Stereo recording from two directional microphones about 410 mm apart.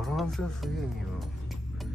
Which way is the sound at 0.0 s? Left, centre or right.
Centre.